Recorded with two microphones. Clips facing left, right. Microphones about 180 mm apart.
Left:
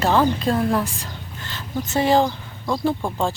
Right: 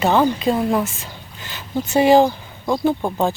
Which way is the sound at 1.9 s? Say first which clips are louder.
Right 5 dB; 15° right (ahead or behind).